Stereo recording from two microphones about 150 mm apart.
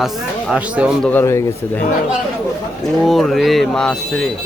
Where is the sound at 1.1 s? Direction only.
15° left (ahead or behind).